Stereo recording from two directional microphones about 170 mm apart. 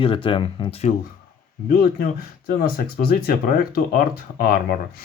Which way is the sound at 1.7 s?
60° left (ahead or behind).